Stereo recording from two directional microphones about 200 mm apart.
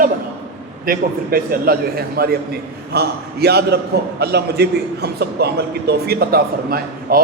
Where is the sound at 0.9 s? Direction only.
45° right (ahead or behind).